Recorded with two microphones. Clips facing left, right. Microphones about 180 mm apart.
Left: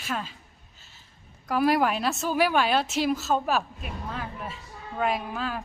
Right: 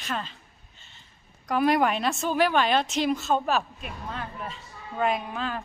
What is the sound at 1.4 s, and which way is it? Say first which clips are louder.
A woman's voice: even; 5° left (ahead or behind).